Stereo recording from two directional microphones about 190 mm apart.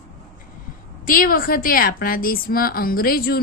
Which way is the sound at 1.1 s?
50° left (ahead or behind).